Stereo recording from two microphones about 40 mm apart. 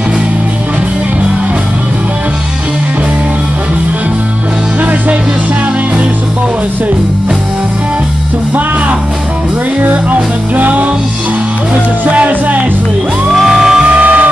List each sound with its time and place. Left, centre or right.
9.8 s music: right
12.1 s music: right
13.3 s music: centre
13.8 s music: right